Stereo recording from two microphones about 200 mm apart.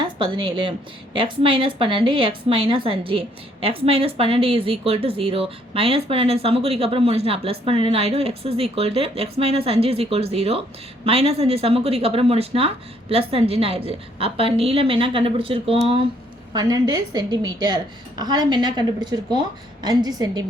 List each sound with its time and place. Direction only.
0.0 s a woman's voice: 25° right (ahead or behind)